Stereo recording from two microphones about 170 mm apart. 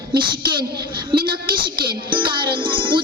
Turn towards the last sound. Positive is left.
turn(degrees=-30)  # may be behind; listen again after turning